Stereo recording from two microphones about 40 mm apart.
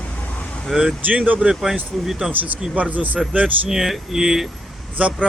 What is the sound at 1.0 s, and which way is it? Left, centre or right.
Speech, right.